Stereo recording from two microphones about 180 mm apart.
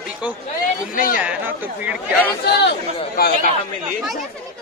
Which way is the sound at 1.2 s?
10° right (ahead or behind).